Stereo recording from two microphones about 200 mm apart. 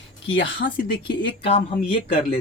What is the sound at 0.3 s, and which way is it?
Speech, 60° left (ahead or behind).